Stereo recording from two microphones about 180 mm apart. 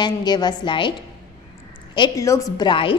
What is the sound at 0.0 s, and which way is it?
Speech, 25° left (ahead or behind).